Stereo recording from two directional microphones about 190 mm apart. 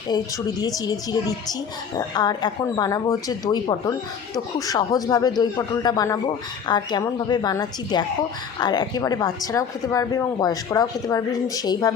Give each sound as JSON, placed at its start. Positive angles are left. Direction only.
{"t": 0.6, "sound": "speech", "side_deg": 20}